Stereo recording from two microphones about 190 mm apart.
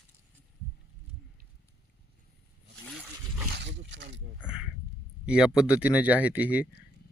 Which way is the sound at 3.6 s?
70° right (ahead or behind).